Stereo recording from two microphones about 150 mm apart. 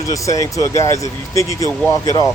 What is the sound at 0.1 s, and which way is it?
Speech, 20° left (ahead or behind).